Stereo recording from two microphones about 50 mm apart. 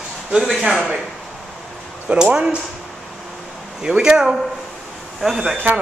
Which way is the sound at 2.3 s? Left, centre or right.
Right.